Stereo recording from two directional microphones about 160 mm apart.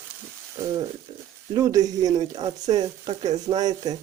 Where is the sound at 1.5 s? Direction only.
20° right (ahead or behind).